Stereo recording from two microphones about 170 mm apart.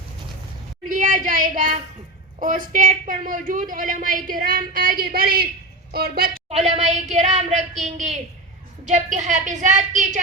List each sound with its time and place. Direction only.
0.9 s a child's voice: 55° right (ahead or behind)
6.5 s a woman's voice: 40° right (ahead or behind)